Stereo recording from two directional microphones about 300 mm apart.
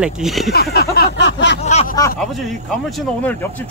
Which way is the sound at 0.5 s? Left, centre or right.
Left.